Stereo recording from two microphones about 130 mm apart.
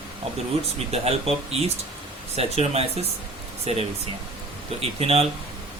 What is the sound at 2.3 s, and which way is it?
Speech, 50° right (ahead or behind).